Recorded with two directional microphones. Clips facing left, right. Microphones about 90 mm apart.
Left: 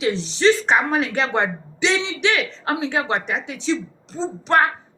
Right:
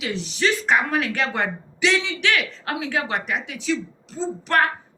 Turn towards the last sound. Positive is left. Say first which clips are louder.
# left 3 dB
turn(degrees=25)  # may be behind; listen again after turning